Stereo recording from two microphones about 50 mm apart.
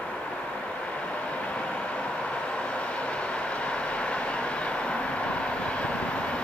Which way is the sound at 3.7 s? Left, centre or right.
Left.